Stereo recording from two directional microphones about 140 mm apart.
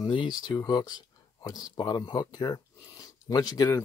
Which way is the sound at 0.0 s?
35° left (ahead or behind).